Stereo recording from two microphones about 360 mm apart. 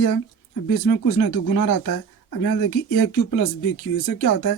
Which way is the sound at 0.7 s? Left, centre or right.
Left.